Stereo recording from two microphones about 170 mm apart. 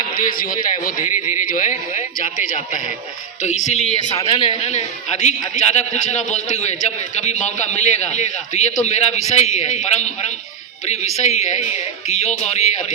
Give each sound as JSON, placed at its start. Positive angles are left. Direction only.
{"t": 0.2, "sound": "a man's voice", "side_deg": 55}
{"t": 3.4, "sound": "a man's voice", "side_deg": 45}